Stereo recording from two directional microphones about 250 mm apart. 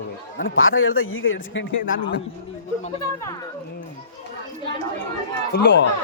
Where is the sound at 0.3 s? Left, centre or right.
Left.